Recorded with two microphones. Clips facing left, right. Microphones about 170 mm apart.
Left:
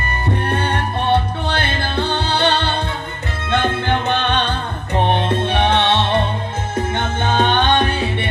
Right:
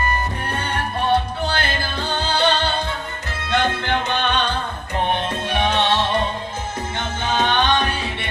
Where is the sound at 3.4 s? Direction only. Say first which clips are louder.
Left 2 dB; 55° left (ahead or behind).